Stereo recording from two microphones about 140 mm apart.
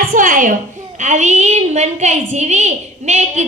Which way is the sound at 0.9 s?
60° right (ahead or behind).